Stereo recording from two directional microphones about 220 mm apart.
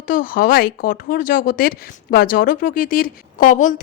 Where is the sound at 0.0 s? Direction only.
35° left (ahead or behind).